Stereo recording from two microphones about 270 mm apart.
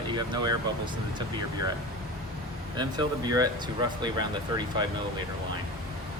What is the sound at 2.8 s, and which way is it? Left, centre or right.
Speech, centre.